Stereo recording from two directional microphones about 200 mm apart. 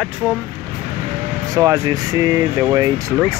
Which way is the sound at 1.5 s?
15° right (ahead or behind).